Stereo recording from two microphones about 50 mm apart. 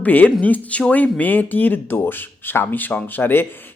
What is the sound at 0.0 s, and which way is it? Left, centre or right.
Speech, left.